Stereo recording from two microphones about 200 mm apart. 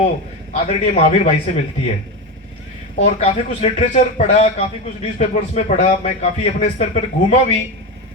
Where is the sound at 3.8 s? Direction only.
35° left (ahead or behind).